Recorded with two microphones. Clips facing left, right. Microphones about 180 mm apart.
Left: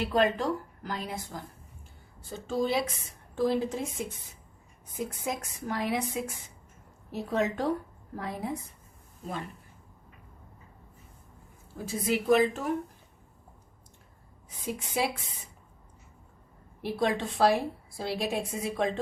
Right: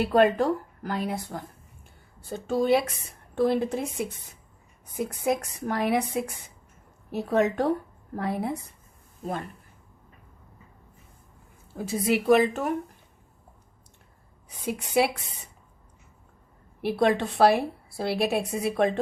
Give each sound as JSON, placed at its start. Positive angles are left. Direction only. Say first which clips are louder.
{"t": 0.0, "sound": "a woman's voice", "louder": "right 5 dB", "side_deg": -55}
{"t": 2.5, "sound": "a woman's voice", "louder": "right 6 dB", "side_deg": -60}
{"t": 5.2, "sound": "a woman's voice", "louder": "right 8 dB", "side_deg": -60}
{"t": 11.9, "sound": "a woman's voice", "louder": "right 4 dB", "side_deg": -70}
{"t": 14.7, "sound": "a woman's voice", "louder": "right 6 dB", "side_deg": -70}
{"t": 16.8, "sound": "a woman's voice", "louder": "right 5 dB", "side_deg": -65}